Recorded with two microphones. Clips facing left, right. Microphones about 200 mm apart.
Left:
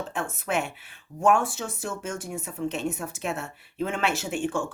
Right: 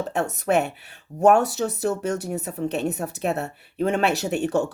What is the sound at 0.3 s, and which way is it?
A woman's voice, 40° right (ahead or behind).